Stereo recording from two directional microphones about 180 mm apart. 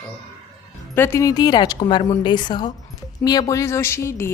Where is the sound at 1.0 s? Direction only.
15° left (ahead or behind).